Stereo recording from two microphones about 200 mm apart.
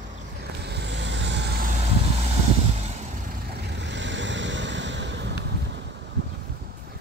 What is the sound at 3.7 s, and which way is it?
Vehicle, 65° right (ahead or behind).